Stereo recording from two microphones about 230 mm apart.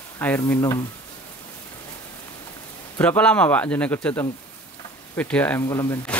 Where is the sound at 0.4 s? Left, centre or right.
Centre.